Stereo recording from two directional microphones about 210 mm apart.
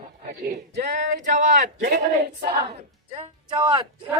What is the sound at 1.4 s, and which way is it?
Speech, 40° right (ahead or behind).